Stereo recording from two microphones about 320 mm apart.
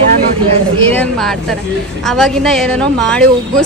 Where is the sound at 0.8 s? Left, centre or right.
Centre.